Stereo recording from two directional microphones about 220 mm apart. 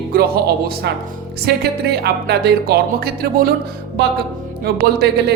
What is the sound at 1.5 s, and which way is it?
A woman's voice, 45° right (ahead or behind).